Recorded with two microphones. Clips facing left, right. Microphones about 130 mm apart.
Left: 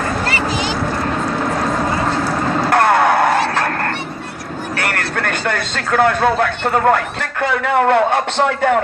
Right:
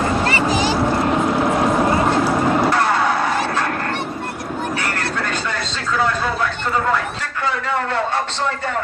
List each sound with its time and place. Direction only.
0.3 s vehicle: 35° right (ahead or behind)
1.1 s vehicle: 15° right (ahead or behind)
2.6 s vehicle: 60° left (ahead or behind)
4.8 s speech: 60° left (ahead or behind)